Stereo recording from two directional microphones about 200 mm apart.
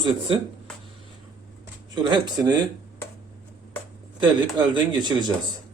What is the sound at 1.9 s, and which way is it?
Speech, 20° right (ahead or behind).